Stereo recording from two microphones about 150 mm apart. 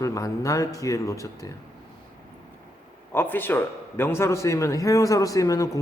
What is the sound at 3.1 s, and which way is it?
A man's voice, 15° left (ahead or behind).